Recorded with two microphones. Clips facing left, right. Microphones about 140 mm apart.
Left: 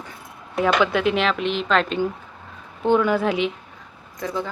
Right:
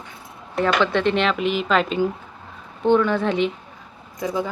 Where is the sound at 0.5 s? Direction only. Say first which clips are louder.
Even; 5° left (ahead or behind).